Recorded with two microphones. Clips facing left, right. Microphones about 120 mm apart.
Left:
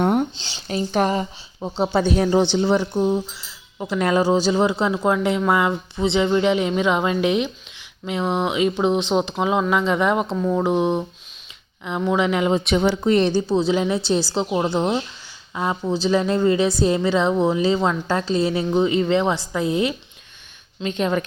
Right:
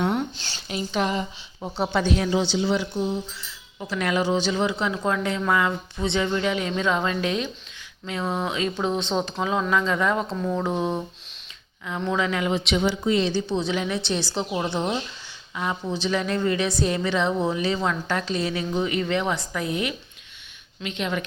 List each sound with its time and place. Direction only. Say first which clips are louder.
0.0 s a sound: left 5 dB; 45° left (ahead or behind)
0.3 s speech: left 1 dB; 15° left (ahead or behind)
0.9 s speech: left 5 dB; 45° left (ahead or behind)
1.8 s speech: left 4 dB; 35° left (ahead or behind)
2.4 s speech: left 5 dB; 55° left (ahead or behind)
3.3 s speech: left 4 dB; 25° left (ahead or behind)
4.9 s a woman's voice: left 5 dB; 20° left (ahead or behind)
10.3 s speech: left 5 dB; 5° left (ahead or behind)
10.6 s a woman's voice: left 6 dB; 20° left (ahead or behind)
12.5 s speech: left 4 dB; 45° left (ahead or behind)
13.5 s a woman's voice: left 6 dB; 30° left (ahead or behind)
20.8 s speech: left 6 dB; 40° left (ahead or behind)